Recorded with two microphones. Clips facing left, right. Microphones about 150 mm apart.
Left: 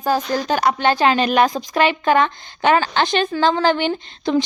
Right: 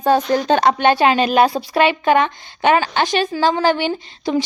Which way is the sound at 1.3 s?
30° right (ahead or behind).